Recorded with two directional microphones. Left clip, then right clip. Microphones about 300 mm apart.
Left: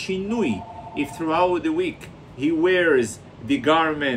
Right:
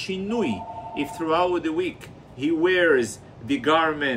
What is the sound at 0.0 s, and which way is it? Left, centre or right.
Speech, centre.